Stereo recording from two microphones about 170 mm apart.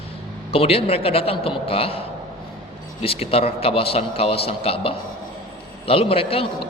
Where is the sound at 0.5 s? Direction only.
35° left (ahead or behind).